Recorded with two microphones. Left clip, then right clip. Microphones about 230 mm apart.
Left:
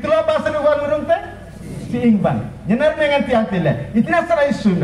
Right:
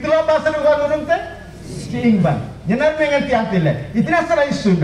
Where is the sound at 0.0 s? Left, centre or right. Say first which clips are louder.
Right 1 dB; left.